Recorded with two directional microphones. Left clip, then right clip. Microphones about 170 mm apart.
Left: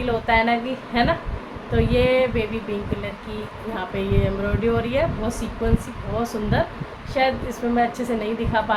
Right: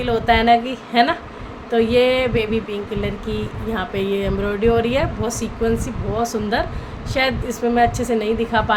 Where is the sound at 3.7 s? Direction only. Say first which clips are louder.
Right 3 dB; 50° right (ahead or behind).